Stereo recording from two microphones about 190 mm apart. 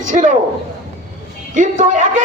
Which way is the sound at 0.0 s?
40° right (ahead or behind).